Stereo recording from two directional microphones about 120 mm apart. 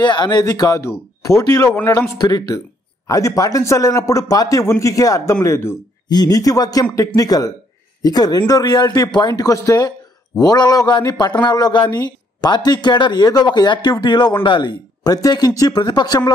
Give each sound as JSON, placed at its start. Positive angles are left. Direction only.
{"t": 0.0, "sound": "speech", "side_deg": 35}
{"t": 6.0, "sound": "speech", "side_deg": 35}